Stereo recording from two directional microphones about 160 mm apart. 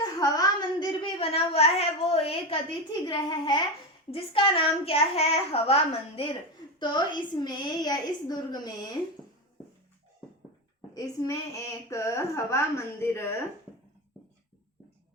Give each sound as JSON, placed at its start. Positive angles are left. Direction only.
{"t": 0.0, "sound": "a sound", "side_deg": 25}
{"t": 1.2, "sound": "a woman's voice", "side_deg": 40}
{"t": 10.9, "sound": "a woman's voice", "side_deg": 20}